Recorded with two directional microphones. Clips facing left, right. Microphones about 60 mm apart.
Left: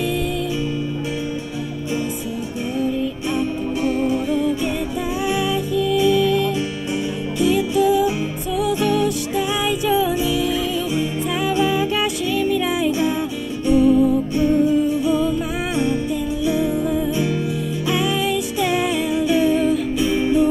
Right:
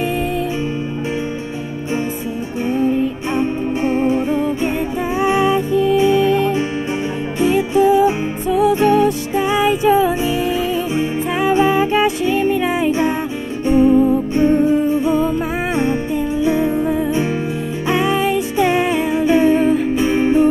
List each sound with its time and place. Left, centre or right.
2.8 s music: right